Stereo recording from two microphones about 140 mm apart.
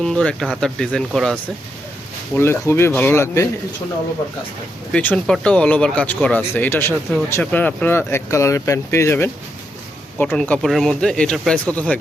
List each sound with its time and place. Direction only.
0.0 s speech: 5° left (ahead or behind)
2.4 s speech: 20° left (ahead or behind)
4.9 s speech: 10° left (ahead or behind)